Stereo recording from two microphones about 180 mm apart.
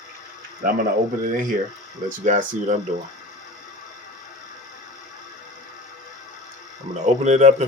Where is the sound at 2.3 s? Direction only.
45° right (ahead or behind).